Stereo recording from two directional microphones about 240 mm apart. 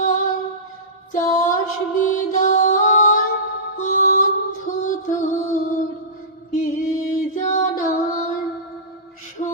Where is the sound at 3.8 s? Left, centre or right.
Left.